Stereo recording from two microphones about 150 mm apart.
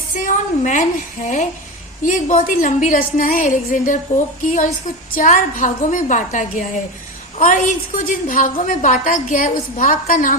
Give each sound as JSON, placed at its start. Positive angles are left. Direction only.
{"t": 0.3, "sound": "a woman's voice", "side_deg": 55}
{"t": 5.1, "sound": "a woman's voice", "side_deg": 60}